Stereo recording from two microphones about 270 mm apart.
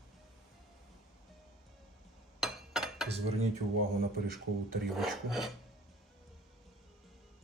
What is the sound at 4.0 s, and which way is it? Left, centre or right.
Speech, right.